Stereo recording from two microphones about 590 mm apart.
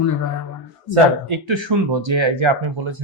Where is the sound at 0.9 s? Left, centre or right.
Right.